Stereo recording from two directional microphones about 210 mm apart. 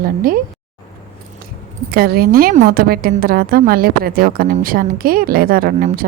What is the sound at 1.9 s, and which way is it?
A woman's voice, 45° right (ahead or behind).